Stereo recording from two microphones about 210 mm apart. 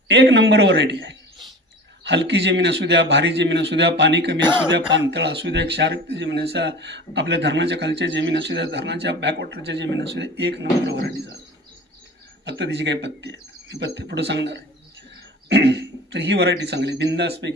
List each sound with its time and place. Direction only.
0.1 s a man's voice: 55° right (ahead or behind)
12.5 s a man's voice: 55° right (ahead or behind)